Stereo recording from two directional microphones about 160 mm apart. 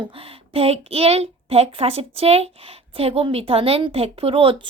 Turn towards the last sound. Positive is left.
turn(degrees=-35)  # may be behind; listen again after turning